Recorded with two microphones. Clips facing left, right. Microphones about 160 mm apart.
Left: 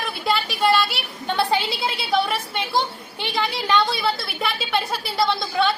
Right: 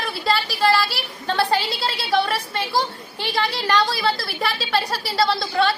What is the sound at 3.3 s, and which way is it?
A woman's voice, centre (ahead or behind).